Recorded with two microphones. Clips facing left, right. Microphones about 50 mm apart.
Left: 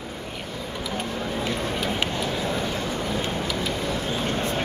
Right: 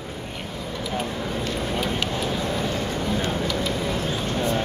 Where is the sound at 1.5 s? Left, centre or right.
Centre.